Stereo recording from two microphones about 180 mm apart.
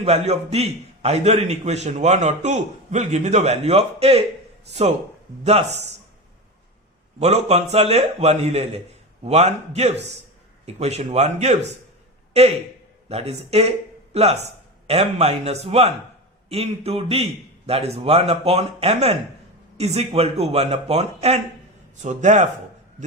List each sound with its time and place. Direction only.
0.0 s a man's voice: 35° right (ahead or behind)
5.4 s a man's voice: 35° right (ahead or behind)
7.2 s a man's voice: 35° right (ahead or behind)